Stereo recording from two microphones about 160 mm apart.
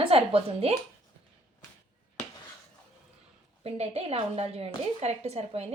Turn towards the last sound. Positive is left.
turn(degrees=-40)  # may be behind; listen again after turning